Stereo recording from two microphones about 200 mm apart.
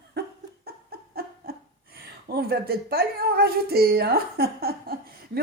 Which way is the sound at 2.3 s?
50° right (ahead or behind).